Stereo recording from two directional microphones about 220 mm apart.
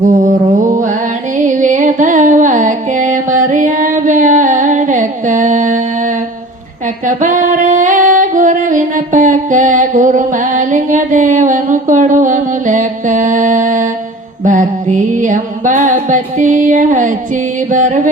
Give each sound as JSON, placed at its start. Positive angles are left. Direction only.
{"t": 0.0, "sound": "music", "side_deg": -35}
{"t": 7.0, "sound": "female singing", "side_deg": -35}
{"t": 14.4, "sound": "music", "side_deg": -35}
{"t": 17.7, "sound": "mantra", "side_deg": -35}